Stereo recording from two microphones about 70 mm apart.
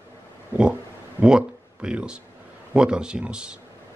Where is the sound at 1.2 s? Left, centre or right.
Centre.